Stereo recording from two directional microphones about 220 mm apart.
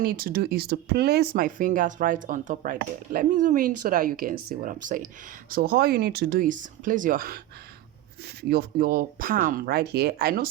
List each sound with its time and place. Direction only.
0.0 s speech: 40° right (ahead or behind)